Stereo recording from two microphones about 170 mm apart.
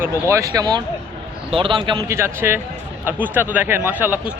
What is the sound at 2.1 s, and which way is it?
Speech, 15° right (ahead or behind).